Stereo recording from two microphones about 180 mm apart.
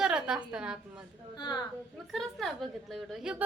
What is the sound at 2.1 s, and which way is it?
Speech, centre (ahead or behind).